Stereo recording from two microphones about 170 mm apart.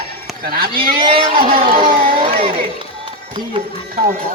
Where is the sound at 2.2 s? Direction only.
35° right (ahead or behind).